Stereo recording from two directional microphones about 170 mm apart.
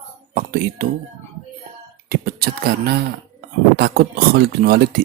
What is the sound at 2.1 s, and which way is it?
Speech, 60° right (ahead or behind).